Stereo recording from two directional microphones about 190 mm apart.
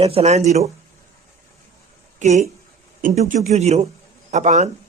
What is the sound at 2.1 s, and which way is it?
Speech, 40° right (ahead or behind).